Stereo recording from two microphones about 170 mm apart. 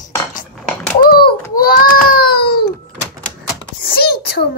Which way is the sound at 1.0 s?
65° left (ahead or behind).